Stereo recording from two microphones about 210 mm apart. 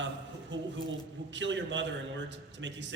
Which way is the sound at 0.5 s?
60° right (ahead or behind).